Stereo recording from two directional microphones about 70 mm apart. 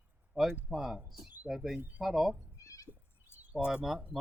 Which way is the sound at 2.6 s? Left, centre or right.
Left.